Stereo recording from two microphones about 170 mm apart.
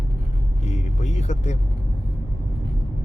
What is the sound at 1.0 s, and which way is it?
Speech, 40° left (ahead or behind).